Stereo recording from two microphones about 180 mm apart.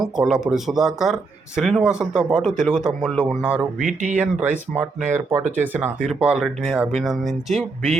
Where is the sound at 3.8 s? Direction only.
45° right (ahead or behind).